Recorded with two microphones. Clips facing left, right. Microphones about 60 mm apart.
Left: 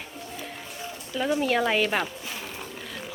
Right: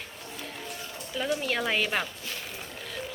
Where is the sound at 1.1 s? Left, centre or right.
Centre.